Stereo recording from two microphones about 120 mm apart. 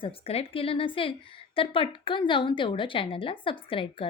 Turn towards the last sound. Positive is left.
turn(degrees=50)  # may be behind; listen again after turning